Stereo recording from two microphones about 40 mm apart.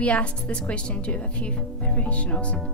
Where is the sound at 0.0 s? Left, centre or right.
Left.